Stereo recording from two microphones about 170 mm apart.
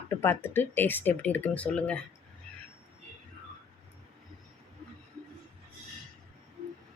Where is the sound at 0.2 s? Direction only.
15° left (ahead or behind).